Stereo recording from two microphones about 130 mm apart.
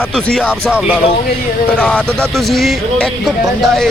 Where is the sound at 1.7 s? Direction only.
10° left (ahead or behind).